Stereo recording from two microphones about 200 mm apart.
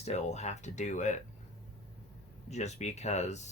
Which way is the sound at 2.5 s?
35° left (ahead or behind).